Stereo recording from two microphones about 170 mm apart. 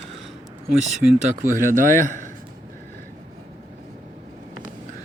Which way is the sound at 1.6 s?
50° right (ahead or behind).